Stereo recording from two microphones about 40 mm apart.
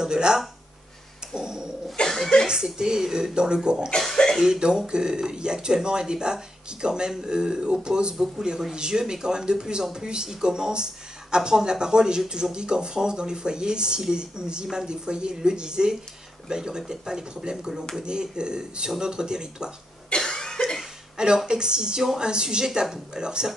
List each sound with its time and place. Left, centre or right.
0.0 s speech: centre
1.3 s dog: centre
2.0 s chuckle: centre
2.4 s speech: centre
4.2 s speech: left
4.6 s speech: right
20.2 s cough: centre
21.5 s speech: centre